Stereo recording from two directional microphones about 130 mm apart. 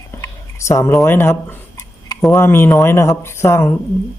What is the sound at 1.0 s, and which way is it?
A woman's voice, 20° left (ahead or behind).